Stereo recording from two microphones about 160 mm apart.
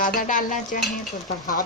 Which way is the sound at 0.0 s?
55° left (ahead or behind).